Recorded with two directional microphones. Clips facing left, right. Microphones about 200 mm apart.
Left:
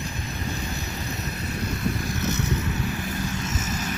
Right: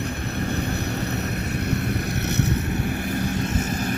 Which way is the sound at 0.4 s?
65° right (ahead or behind).